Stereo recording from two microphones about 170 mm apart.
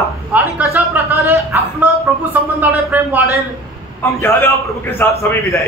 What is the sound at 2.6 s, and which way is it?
Speech, 10° right (ahead or behind).